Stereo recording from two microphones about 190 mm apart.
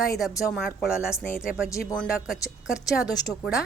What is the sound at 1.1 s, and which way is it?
Speech, 15° left (ahead or behind).